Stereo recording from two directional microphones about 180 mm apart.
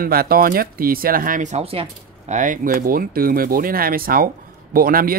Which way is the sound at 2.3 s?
45° right (ahead or behind).